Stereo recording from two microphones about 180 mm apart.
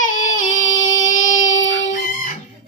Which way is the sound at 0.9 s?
45° left (ahead or behind).